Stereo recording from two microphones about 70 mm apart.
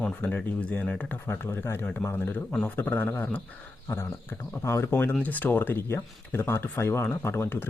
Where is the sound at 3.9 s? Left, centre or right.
Left.